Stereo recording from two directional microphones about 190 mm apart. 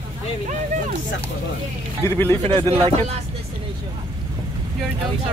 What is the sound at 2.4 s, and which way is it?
Speech, 25° right (ahead or behind).